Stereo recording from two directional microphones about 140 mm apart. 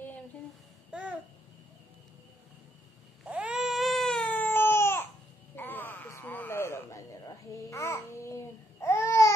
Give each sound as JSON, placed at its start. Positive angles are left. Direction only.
{"t": 0.9, "sound": "babbling", "side_deg": -5}
{"t": 3.3, "sound": "baby cry", "side_deg": -10}
{"t": 5.6, "sound": "a sound", "side_deg": 15}